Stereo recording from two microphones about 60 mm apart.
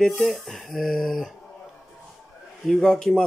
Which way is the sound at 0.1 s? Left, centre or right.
Centre.